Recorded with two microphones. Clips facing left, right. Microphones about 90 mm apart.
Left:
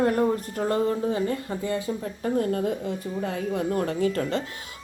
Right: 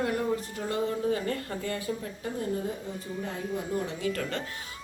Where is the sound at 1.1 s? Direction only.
20° left (ahead or behind).